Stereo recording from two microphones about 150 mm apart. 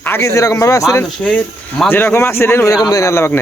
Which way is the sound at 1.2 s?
5° left (ahead or behind).